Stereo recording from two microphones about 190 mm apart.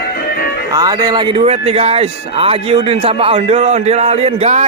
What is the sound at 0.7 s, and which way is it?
Speech, 20° right (ahead or behind).